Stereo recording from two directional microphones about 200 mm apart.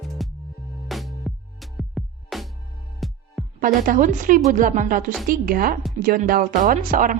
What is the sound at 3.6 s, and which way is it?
A woman's voice, 40° right (ahead or behind).